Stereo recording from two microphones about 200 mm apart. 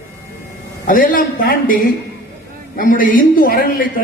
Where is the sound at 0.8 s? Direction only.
45° left (ahead or behind).